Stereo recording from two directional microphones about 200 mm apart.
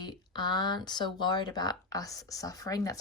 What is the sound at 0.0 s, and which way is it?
Speech, 20° left (ahead or behind).